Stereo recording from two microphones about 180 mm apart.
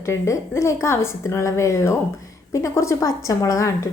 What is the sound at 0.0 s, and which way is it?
A woman's voice, 15° left (ahead or behind).